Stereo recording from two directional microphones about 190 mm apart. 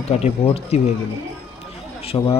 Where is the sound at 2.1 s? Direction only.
20° left (ahead or behind).